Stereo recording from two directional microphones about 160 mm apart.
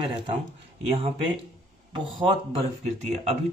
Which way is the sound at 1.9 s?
30° right (ahead or behind).